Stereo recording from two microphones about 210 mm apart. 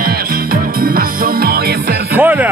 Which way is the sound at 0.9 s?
45° right (ahead or behind).